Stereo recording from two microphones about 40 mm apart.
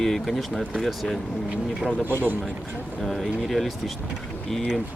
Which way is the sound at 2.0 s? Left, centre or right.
Right.